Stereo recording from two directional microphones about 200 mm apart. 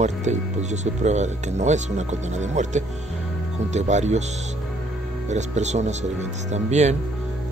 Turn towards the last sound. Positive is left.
turn(degrees=-35)  # may be behind; listen again after turning